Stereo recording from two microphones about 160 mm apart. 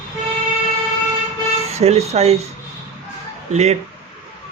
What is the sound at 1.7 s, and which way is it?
Speech, 40° right (ahead or behind).